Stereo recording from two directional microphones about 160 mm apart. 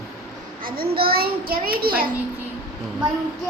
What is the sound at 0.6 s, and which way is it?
A child's voice, 65° right (ahead or behind).